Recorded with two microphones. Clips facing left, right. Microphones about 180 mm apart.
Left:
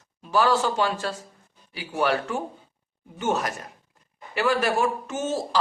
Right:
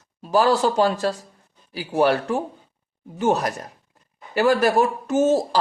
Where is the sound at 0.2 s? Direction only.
35° right (ahead or behind).